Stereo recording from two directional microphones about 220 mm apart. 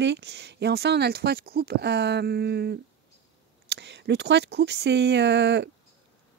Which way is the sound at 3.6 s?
50° right (ahead or behind).